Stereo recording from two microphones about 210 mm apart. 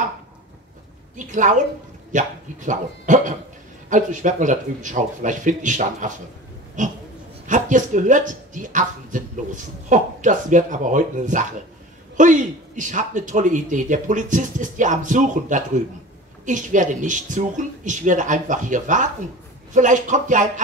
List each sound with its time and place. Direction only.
1.1 s speech: 35° right (ahead or behind)
7.4 s speech: 35° right (ahead or behind)